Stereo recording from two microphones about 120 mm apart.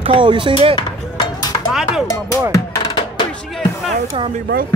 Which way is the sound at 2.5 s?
40° left (ahead or behind).